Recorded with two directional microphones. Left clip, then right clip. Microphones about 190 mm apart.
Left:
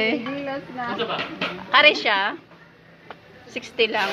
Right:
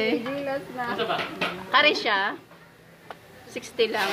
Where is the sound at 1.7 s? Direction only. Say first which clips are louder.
Left 5 dB; 20° right (ahead or behind).